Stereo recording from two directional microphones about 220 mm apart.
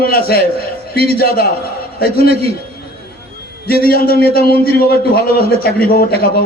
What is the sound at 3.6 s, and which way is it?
A man's voice, 45° left (ahead or behind).